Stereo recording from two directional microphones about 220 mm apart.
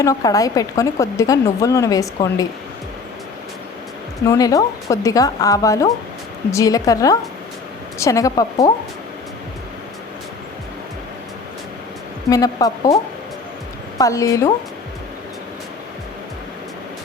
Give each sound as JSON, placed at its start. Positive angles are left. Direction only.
{"t": 0.0, "sound": "a woman's voice", "side_deg": 15}
{"t": 4.3, "sound": "a woman's voice", "side_deg": 15}
{"t": 12.3, "sound": "a woman's voice", "side_deg": 15}
{"t": 14.0, "sound": "a woman's voice", "side_deg": 15}